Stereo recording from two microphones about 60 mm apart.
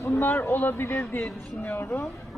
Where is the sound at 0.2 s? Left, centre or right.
Left.